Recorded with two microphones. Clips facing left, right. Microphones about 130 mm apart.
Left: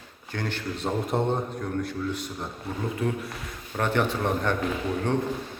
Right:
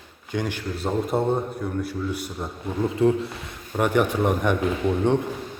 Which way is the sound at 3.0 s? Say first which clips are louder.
Right 11 dB; 25° right (ahead or behind).